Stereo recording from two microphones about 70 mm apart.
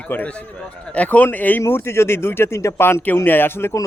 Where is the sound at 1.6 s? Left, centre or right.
Left.